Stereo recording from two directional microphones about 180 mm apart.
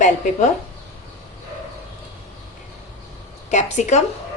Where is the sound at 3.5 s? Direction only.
40° left (ahead or behind).